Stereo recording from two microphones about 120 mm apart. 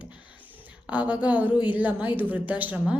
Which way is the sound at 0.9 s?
10° right (ahead or behind).